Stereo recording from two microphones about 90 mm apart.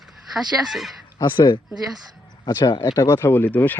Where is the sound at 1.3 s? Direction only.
65° left (ahead or behind).